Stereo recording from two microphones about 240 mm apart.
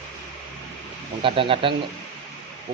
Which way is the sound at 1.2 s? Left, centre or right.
Right.